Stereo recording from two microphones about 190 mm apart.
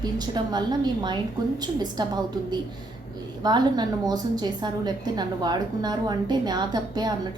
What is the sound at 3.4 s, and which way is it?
A woman's voice, 20° right (ahead or behind).